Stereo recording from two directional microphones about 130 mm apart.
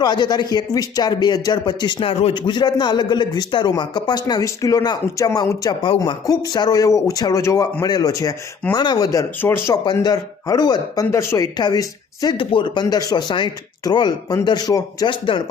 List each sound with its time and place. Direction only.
0.0 s a man's voice: 35° left (ahead or behind)
9.4 s speech: 20° left (ahead or behind)
9.8 s a man's voice: 30° left (ahead or behind)